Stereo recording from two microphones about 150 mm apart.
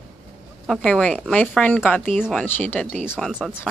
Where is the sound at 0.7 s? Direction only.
5° left (ahead or behind).